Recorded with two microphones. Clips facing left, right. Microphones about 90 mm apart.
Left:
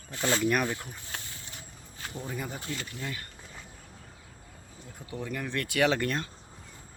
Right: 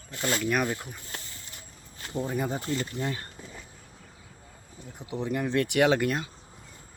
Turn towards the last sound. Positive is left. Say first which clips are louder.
# right 3 dB
turn(degrees=-10)  # may be behind; listen again after turning